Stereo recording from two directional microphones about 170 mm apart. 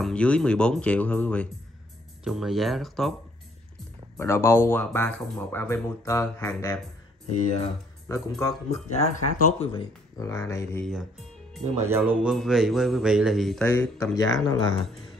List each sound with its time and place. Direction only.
0.0 s speech: 5° left (ahead or behind)
2.2 s a man's voice: centre (ahead or behind)
4.2 s speech: 15° left (ahead or behind)
8.8 s speech: 45° left (ahead or behind)
10.1 s speech: 15° left (ahead or behind)
10.8 s speech: centre (ahead or behind)
11.8 s a man's voice: 15° right (ahead or behind); by 14.8 s 25° left (ahead or behind)